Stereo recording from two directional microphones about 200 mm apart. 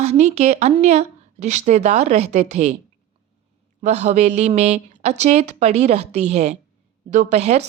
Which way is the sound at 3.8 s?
35° right (ahead or behind).